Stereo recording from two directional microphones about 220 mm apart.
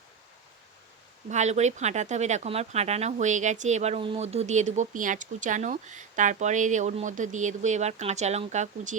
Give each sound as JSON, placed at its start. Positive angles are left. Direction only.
{"t": 1.3, "sound": "speech", "side_deg": -30}